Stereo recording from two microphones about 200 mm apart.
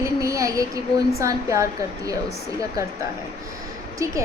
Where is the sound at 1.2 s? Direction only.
15° right (ahead or behind).